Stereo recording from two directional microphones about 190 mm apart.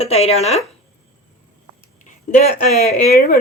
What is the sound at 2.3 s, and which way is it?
Speech, 45° left (ahead or behind).